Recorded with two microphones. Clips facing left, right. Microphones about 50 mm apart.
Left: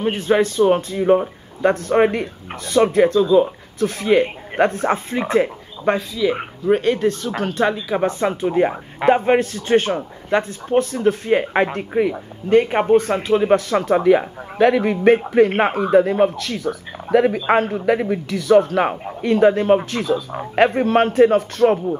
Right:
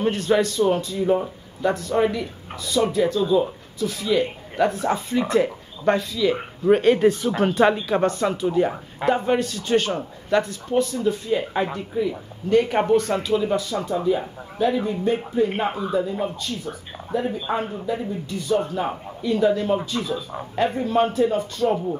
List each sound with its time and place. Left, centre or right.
0.0 s speech: left
5.9 s speech: centre
6.7 s speech: centre
7.9 s speech: centre
8.2 s speech: left
13.3 s speech: left
17.5 s speech: left
19.2 s a man's voice: left